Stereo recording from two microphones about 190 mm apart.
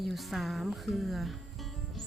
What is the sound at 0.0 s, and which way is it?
Speech, centre (ahead or behind).